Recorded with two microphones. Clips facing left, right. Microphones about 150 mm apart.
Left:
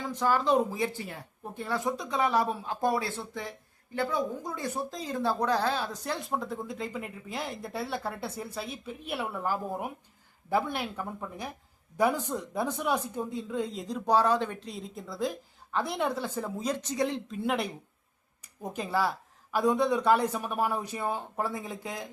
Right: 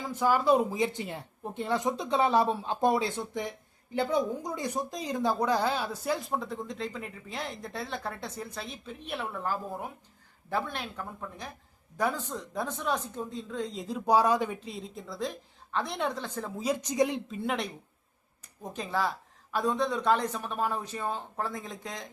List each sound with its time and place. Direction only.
0.0 s speech: 10° right (ahead or behind)
6.1 s speech: centre (ahead or behind)
16.6 s speech: 10° right (ahead or behind)
17.2 s speech: centre (ahead or behind)